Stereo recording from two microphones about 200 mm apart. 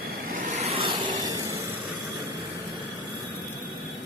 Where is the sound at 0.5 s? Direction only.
30° right (ahead or behind).